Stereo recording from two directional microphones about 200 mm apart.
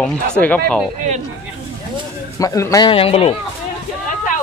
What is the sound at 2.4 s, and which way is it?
Speech, 15° left (ahead or behind).